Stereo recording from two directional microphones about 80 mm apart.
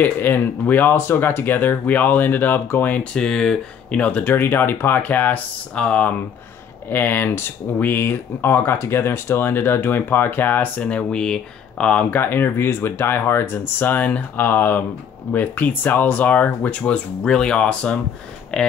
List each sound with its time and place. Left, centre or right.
0.0 s speech: left; by 18.7 s centre